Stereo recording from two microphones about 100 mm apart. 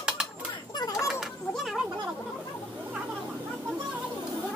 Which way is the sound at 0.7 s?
40° left (ahead or behind).